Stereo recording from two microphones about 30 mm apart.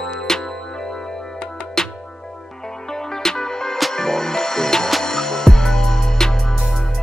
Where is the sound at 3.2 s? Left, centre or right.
Centre.